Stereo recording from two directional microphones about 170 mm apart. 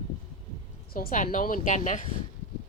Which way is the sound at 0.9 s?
55° left (ahead or behind).